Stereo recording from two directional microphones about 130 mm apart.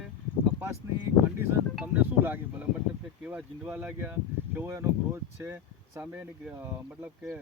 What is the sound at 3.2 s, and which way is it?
Speech, 10° right (ahead or behind).